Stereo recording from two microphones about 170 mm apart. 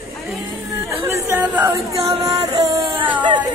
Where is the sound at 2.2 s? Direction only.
20° right (ahead or behind).